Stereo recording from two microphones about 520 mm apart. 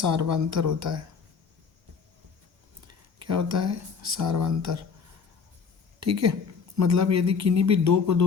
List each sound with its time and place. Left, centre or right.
0.0 s speech: right
2.8 s speech: right
6.0 s a woman's voice: right